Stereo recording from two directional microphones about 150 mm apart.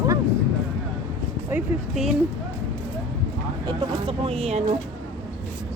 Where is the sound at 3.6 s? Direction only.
35° right (ahead or behind).